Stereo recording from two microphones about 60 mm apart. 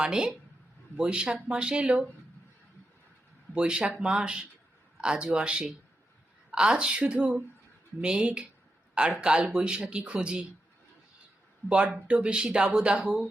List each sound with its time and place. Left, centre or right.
0.0 s speech: centre
3.5 s speech: centre
11.7 s speech: right